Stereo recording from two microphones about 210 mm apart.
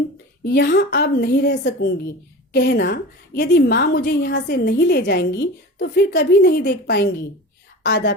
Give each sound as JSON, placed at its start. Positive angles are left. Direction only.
{"t": 0.4, "sound": "a woman's voice", "side_deg": 50}